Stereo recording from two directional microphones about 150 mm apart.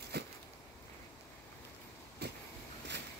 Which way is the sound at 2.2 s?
90° right.